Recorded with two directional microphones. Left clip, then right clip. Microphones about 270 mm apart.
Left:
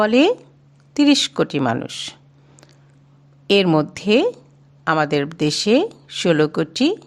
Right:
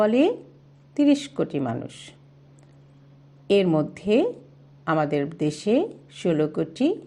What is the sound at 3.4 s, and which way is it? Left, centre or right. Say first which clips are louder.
Speech: left 5 dB; left.